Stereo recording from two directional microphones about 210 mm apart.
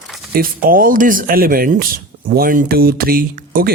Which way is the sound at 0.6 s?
40° right (ahead or behind).